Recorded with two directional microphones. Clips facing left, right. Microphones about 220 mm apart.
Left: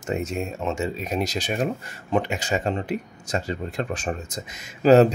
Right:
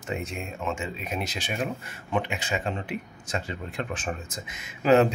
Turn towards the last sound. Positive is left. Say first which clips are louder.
# left 5 dB
turn(degrees=40)  # may be behind; listen again after turning